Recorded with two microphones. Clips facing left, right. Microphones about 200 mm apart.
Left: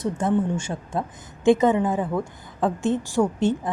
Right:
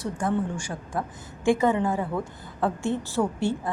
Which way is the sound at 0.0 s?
20° left (ahead or behind).